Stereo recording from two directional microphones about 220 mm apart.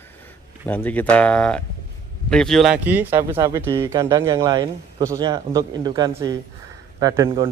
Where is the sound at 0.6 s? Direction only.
10° left (ahead or behind).